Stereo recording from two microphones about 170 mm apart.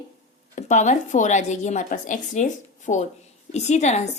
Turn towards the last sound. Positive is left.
turn(degrees=40)  # may be behind; listen again after turning